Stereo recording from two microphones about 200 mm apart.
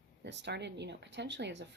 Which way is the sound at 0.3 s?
60° right (ahead or behind).